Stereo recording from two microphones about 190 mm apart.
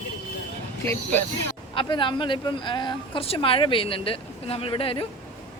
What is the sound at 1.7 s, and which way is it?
Speech, 25° left (ahead or behind).